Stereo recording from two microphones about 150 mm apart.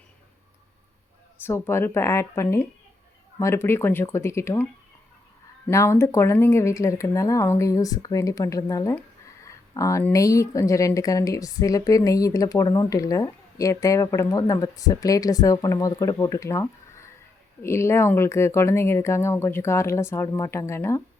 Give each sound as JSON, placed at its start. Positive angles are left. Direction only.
{"t": 1.5, "sound": "speech", "side_deg": 15}
{"t": 5.6, "sound": "speech", "side_deg": 20}